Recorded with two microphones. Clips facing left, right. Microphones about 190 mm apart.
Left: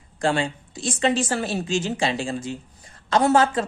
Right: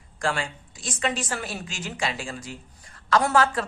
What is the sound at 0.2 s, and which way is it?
A woman's voice, 25° left (ahead or behind).